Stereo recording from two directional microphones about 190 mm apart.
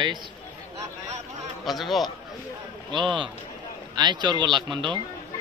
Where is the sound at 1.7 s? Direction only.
Centre (ahead or behind).